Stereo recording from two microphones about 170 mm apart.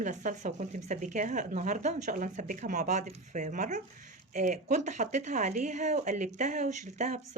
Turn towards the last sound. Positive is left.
turn(degrees=-45)  # may be behind; listen again after turning